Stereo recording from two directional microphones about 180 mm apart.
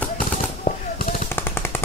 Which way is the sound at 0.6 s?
55° left (ahead or behind).